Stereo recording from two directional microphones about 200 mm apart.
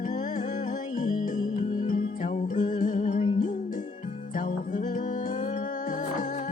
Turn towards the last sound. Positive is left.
turn(degrees=40)  # may be behind; listen again after turning